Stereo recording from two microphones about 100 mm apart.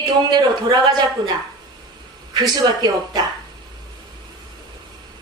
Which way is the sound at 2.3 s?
45° right (ahead or behind).